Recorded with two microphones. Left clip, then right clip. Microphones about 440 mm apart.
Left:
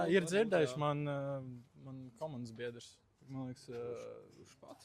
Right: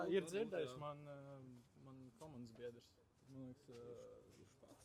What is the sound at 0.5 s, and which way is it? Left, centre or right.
Speech, left.